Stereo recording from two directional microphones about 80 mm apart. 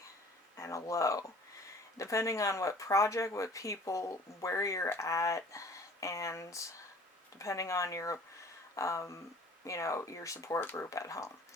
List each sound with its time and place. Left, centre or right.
0.5 s speech: left
10.6 s speech: left
10.8 s speech: left